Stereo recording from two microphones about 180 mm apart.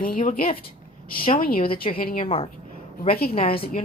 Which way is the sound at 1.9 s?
50° left (ahead or behind).